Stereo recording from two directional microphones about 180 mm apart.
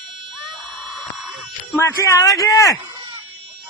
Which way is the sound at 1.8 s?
20° left (ahead or behind).